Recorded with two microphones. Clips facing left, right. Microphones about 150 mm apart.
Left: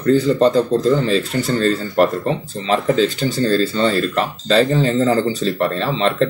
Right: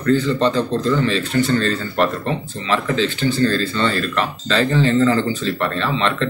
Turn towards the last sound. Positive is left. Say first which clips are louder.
# left 3 dB
turn(degrees=40)  # may be behind; listen again after turning